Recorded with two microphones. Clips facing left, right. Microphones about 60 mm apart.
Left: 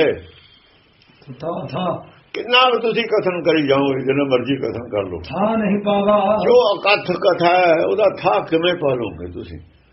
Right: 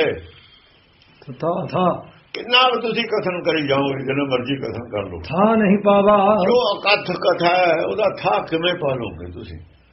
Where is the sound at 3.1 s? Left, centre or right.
Left.